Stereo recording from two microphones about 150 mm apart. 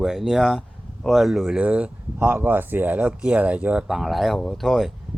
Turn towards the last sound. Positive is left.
turn(degrees=0)  # may be behind; listen again after turning